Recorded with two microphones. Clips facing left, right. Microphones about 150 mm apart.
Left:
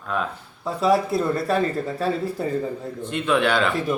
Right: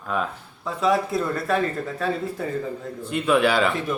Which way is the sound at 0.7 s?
35° left (ahead or behind).